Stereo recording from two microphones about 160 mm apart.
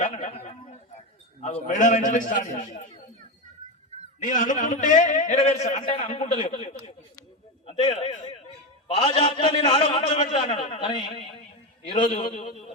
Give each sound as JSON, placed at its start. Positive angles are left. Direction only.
{"t": 0.0, "sound": "a sound", "side_deg": 45}
{"t": 1.6, "sound": "a man's voice", "side_deg": 50}
{"t": 4.2, "sound": "a man's voice", "side_deg": 55}
{"t": 12.4, "sound": "a man's voice", "side_deg": 50}